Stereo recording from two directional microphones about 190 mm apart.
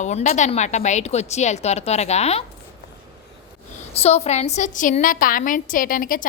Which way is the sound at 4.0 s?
35° left (ahead or behind).